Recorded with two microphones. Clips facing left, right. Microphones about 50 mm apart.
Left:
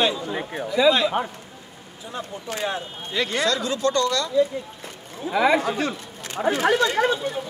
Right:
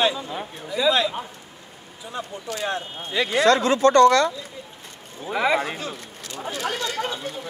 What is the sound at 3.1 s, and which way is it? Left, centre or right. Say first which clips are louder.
Speech: right 2 dB; centre.